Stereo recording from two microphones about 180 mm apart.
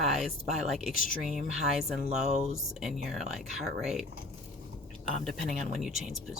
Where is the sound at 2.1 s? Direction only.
5° right (ahead or behind).